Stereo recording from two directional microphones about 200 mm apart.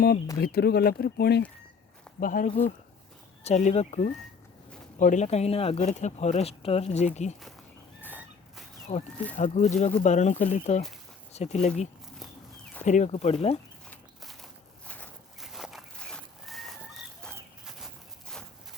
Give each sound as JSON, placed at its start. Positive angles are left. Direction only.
{"t": 0.3, "sound": "speech", "side_deg": 50}
{"t": 2.2, "sound": "speech", "side_deg": 40}
{"t": 8.0, "sound": "a sound", "side_deg": 10}
{"t": 8.9, "sound": "speech", "side_deg": 35}
{"t": 13.9, "sound": "walk", "side_deg": 0}